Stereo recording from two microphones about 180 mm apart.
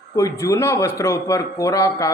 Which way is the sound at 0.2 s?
15° left (ahead or behind).